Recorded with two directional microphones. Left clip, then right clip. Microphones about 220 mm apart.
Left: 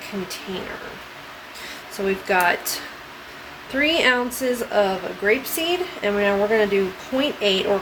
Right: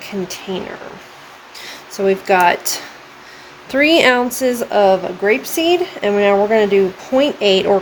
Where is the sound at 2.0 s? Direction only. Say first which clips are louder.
Right 7 dB; 45° right (ahead or behind).